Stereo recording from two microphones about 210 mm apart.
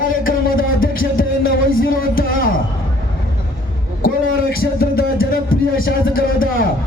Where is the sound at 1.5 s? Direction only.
45° left (ahead or behind).